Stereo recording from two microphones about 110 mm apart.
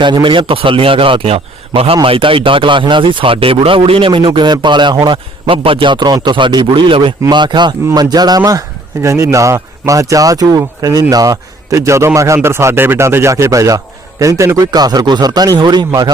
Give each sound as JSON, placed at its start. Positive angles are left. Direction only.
{"t": 0.0, "sound": "a man's voice", "side_deg": -45}
{"t": 4.3, "sound": "a man's voice", "side_deg": -40}